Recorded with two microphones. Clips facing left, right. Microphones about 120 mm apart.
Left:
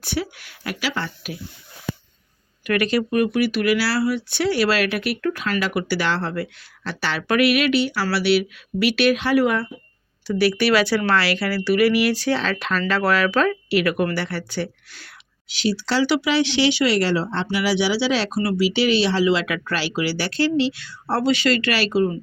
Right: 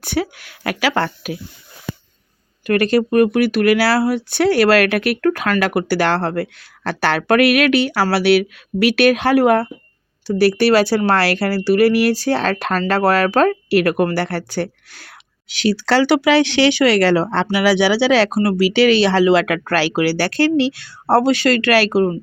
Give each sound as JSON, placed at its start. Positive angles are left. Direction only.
{"t": 0.0, "sound": "speech", "side_deg": -50}
{"t": 2.6, "sound": "speech", "side_deg": -35}
{"t": 18.3, "sound": "speech", "side_deg": -50}